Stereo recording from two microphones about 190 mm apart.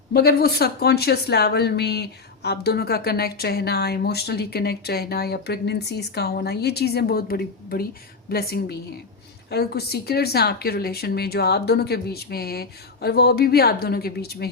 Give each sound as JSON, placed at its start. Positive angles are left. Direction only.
{"t": 0.1, "sound": "speech", "side_deg": 55}